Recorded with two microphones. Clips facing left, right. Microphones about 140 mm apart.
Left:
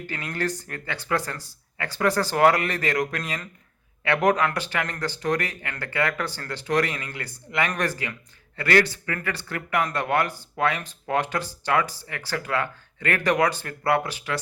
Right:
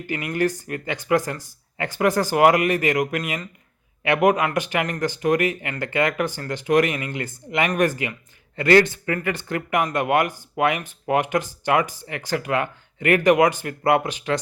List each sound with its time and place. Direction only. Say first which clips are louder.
0.1 s speech: right 7 dB; 15° right (ahead or behind)